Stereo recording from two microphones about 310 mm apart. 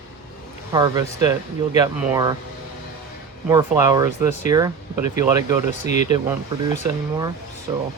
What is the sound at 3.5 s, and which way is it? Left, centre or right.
Speech, centre.